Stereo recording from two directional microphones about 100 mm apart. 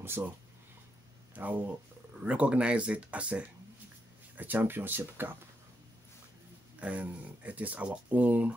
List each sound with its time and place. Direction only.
1.3 s speech: 15° right (ahead or behind)
6.8 s speech: 15° right (ahead or behind)